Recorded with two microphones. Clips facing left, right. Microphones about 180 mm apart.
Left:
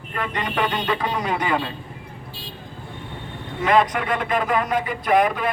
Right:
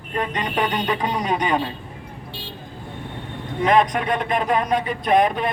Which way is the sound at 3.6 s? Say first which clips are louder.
Right 1 dB; 20° right (ahead or behind).